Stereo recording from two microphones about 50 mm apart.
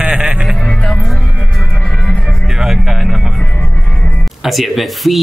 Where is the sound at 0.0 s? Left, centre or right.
Centre.